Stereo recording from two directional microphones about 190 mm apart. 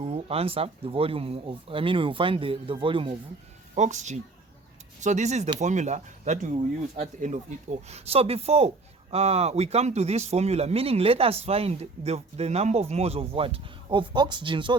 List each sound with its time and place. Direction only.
0.0 s speech: 30° right (ahead or behind)
3.8 s speech: 40° right (ahead or behind)